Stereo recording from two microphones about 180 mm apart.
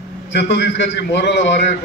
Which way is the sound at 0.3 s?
70° left (ahead or behind).